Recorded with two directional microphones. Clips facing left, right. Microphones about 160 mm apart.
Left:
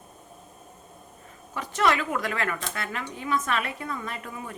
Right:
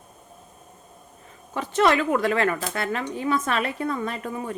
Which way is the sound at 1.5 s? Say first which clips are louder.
Right 4 dB; 25° right (ahead or behind).